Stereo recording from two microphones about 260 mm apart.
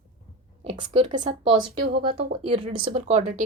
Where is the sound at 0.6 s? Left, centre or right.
Right.